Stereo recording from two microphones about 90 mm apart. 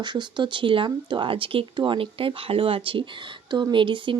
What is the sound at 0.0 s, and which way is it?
Speech, 55° right (ahead or behind).